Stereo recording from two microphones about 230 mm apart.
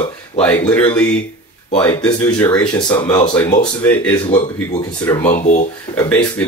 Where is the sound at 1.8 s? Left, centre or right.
Centre.